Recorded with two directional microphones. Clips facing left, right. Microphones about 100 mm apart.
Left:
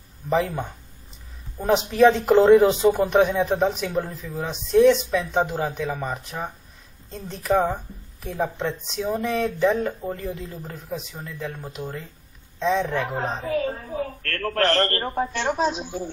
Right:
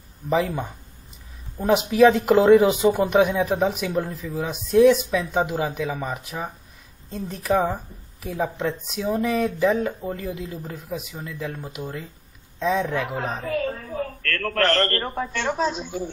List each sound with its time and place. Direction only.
0.3 s a woman's voice: centre (ahead or behind)
13.2 s speech: 30° left (ahead or behind)
13.7 s a sound: 30° left (ahead or behind)
14.0 s a man's voice: 30° left (ahead or behind)